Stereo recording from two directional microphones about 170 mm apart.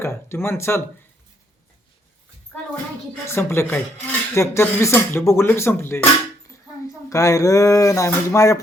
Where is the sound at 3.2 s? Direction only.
15° left (ahead or behind).